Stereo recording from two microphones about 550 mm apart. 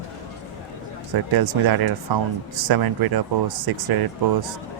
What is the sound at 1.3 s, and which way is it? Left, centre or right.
Speech, right.